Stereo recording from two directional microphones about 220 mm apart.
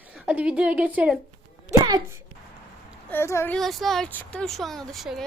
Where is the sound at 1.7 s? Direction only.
20° right (ahead or behind).